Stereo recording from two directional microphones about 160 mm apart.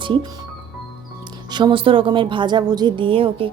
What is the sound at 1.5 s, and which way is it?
A woman's voice, 30° right (ahead or behind).